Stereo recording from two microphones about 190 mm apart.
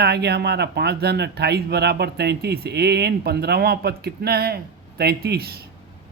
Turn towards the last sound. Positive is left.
turn(degrees=-55)  # may be behind; listen again after turning